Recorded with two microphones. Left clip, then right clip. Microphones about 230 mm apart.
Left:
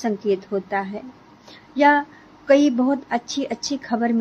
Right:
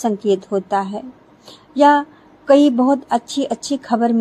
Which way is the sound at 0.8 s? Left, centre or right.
Centre.